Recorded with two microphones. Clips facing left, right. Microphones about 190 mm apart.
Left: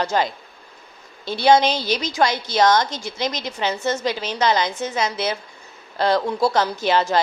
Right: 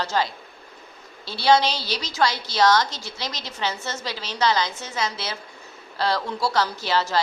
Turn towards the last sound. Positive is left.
turn(degrees=20)  # may be behind; listen again after turning